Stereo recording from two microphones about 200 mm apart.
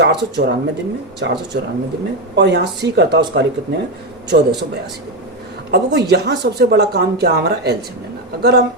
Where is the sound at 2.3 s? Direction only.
60° right (ahead or behind).